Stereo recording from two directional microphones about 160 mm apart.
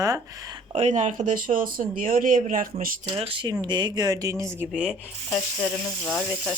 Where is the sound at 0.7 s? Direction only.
45° right (ahead or behind).